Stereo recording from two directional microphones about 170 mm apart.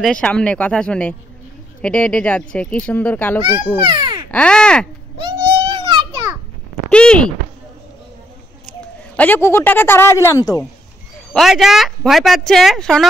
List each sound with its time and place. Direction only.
0.0 s speech: 5° left (ahead or behind)
3.8 s a sound: 25° right (ahead or behind)
4.3 s crow: 5° left (ahead or behind)
5.7 s a sound: 30° right (ahead or behind)
6.9 s speech: 5° left (ahead or behind)
9.1 s speech: 10° left (ahead or behind)
11.3 s a woman's voice: centre (ahead or behind)